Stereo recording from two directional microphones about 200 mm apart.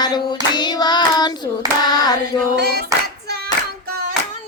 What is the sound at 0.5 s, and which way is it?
Child singing, 20° left (ahead or behind).